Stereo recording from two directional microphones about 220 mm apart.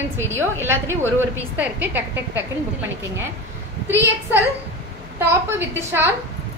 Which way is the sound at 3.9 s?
10° right (ahead or behind).